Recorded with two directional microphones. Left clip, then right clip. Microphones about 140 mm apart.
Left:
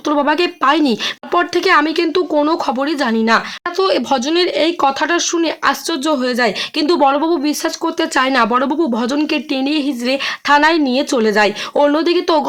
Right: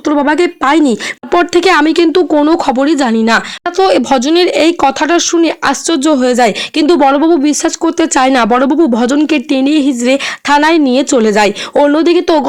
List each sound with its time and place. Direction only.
0.1 s speech: 30° right (ahead or behind)
1.3 s speech: 55° right (ahead or behind); by 12.5 s 40° right (ahead or behind)